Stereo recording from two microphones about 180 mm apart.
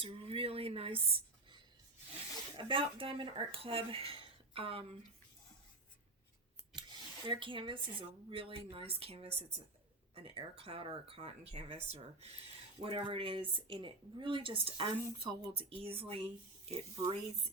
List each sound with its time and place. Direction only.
0.0 s speech: 30° right (ahead or behind)
2.6 s speech: 30° right (ahead or behind)
7.3 s a woman's voice: 30° right (ahead or behind)